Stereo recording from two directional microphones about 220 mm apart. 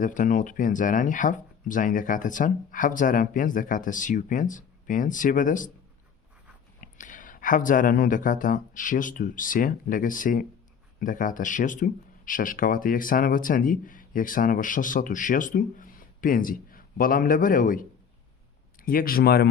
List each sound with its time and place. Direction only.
0.0 s speech: 35° left (ahead or behind)
6.8 s speech: 35° left (ahead or behind)